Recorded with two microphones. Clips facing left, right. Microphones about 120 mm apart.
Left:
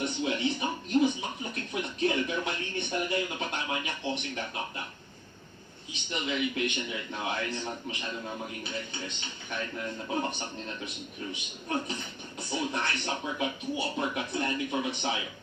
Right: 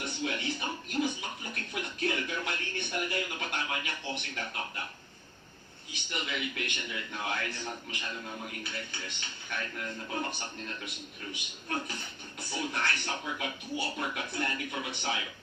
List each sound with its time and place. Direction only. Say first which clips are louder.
0.0 s music: left 5 dB; 25° left (ahead or behind)
5.9 s speech: left 4 dB; 20° left (ahead or behind)